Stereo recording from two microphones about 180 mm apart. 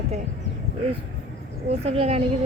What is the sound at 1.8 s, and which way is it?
Speech, 35° right (ahead or behind).